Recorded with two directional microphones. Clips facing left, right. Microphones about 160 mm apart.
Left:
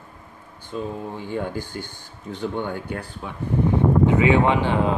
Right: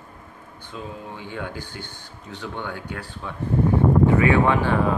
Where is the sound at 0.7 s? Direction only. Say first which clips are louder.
Left 6 dB; 45° left (ahead or behind).